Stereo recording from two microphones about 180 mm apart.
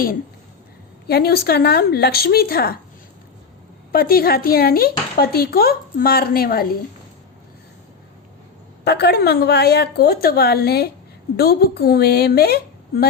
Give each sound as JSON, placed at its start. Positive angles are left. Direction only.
{"t": 1.0, "sound": "speech", "side_deg": 60}
{"t": 3.9, "sound": "speech", "side_deg": 55}
{"t": 8.8, "sound": "speech", "side_deg": 65}